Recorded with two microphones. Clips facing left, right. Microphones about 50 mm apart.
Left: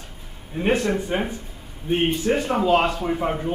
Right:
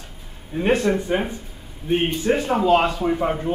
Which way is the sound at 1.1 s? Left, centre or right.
Centre.